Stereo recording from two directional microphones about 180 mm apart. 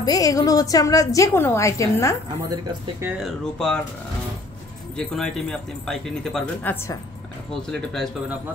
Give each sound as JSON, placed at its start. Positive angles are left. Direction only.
{"t": 0.0, "sound": "a woman's voice", "side_deg": 20}
{"t": 2.5, "sound": "speech", "side_deg": -15}
{"t": 3.3, "sound": "speech", "side_deg": 5}
{"t": 4.9, "sound": "speech", "side_deg": 5}